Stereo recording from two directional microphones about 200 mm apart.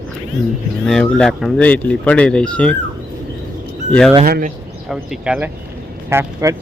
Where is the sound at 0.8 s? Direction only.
5° left (ahead or behind).